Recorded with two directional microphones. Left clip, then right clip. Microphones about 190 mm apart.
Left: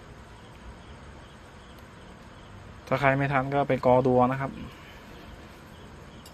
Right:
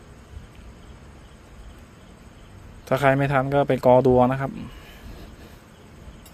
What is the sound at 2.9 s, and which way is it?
Speech, 40° right (ahead or behind).